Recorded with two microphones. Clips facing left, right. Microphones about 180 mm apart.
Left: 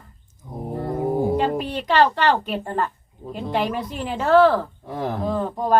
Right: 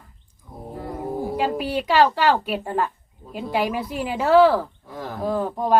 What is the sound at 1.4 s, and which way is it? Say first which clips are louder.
Speech: even; 5° right (ahead or behind).